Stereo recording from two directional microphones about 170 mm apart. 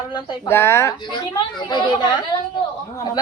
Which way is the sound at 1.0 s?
25° left (ahead or behind).